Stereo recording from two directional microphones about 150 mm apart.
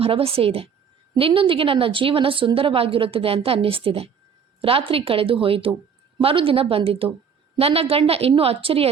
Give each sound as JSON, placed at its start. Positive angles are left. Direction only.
{"t": 0.0, "sound": "a woman's voice", "side_deg": -40}